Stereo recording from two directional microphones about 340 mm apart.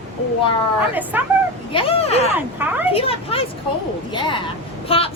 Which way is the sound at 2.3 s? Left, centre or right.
Centre.